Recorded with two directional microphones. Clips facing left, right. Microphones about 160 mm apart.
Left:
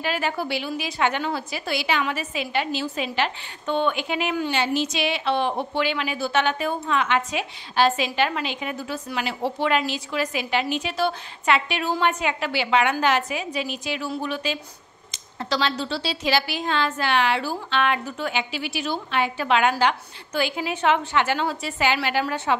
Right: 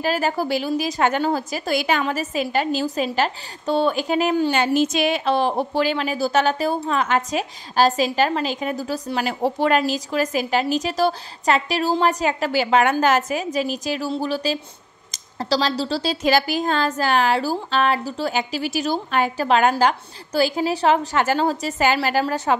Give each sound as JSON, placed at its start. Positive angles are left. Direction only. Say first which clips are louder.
{"t": 0.0, "sound": "a woman's voice", "louder": "right 4 dB", "side_deg": -40}